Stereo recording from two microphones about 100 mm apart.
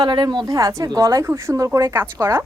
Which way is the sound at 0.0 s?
45° right (ahead or behind).